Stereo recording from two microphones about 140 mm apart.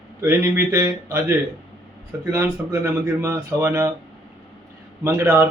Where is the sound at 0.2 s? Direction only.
20° right (ahead or behind).